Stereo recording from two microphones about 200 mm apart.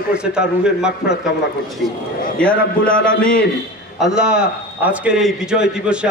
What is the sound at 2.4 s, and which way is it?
A man's voice, 5° left (ahead or behind).